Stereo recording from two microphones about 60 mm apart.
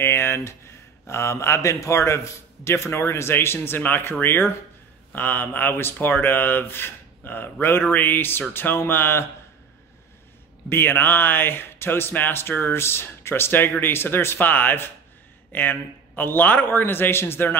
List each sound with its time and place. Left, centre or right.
0.0 s speech: left
10.7 s speech: left